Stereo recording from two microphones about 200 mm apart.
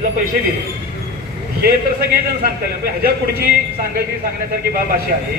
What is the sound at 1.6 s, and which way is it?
A man's voice, 50° right (ahead or behind).